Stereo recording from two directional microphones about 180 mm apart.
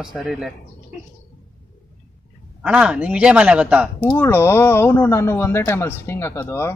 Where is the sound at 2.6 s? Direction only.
5° right (ahead or behind).